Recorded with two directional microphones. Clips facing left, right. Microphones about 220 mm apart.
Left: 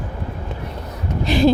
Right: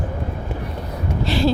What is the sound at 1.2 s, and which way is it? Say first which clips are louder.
Speech: left 4 dB; 15° left (ahead or behind).